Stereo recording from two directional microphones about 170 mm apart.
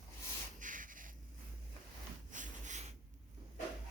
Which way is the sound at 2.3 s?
45° right (ahead or behind).